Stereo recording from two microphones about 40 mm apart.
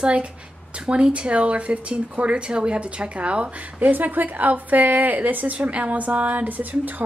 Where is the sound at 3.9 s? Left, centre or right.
Right.